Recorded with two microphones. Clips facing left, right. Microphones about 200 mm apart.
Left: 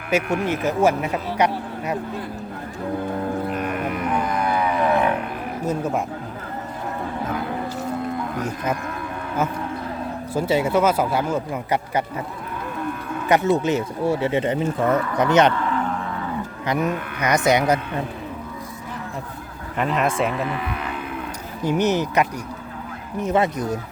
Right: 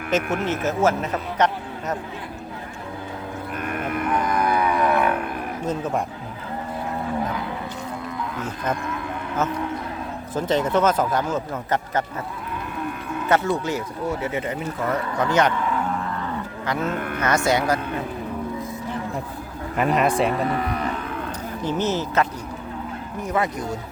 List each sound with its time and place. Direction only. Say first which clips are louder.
0.1 s speech: left 2 dB; 10° left (ahead or behind)
4.4 s a sound: right 2 dB; 25° left (ahead or behind)
5.6 s speech: left 2 dB; 10° left (ahead or behind)
10.3 s speech: left 1 dB; 10° left (ahead or behind)
13.2 s speech: left 3 dB; 15° left (ahead or behind)
16.6 s speech: left 2 dB; 15° left (ahead or behind)
20.0 s speech: right 1 dB; centre (ahead or behind)
21.6 s speech: left 4 dB; 15° left (ahead or behind)